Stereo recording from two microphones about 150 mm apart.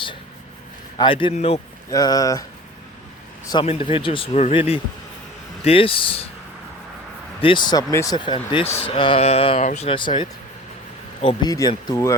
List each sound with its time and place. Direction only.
0.9 s speech: 35° left (ahead or behind)
1.3 s a man's voice: 45° left (ahead or behind)
1.9 s speech: 25° left (ahead or behind)
3.5 s speech: 35° left (ahead or behind)
7.4 s speech: 30° left (ahead or behind)
11.9 s speech: 20° left (ahead or behind)